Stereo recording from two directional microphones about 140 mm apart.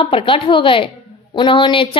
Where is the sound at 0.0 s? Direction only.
40° left (ahead or behind).